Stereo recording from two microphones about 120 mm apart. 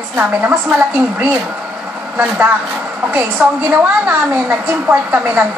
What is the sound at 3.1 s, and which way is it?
A woman's voice, 15° right (ahead or behind).